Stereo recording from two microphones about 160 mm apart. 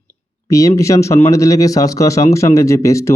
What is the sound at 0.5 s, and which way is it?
Speech, 20° left (ahead or behind).